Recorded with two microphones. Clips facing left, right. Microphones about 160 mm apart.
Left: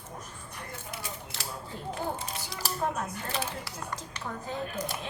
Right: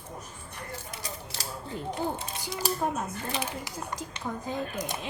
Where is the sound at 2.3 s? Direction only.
20° right (ahead or behind).